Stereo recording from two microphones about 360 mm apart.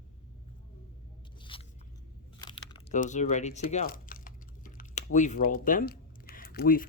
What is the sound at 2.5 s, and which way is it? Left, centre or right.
Crumpling, centre.